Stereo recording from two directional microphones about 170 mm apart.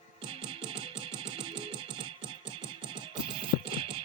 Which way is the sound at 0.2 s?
30° right (ahead or behind).